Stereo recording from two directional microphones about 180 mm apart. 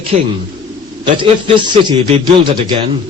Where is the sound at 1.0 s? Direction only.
30° right (ahead or behind).